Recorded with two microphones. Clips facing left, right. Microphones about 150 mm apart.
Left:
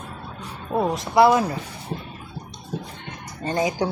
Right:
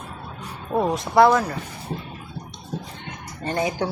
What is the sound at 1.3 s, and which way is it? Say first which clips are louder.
Speech: left 1 dB; 15° left (ahead or behind).